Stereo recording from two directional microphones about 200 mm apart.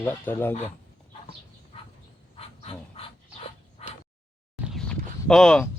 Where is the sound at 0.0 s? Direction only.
10° left (ahead or behind).